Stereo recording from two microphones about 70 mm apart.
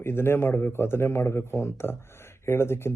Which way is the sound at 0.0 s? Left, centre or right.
Left.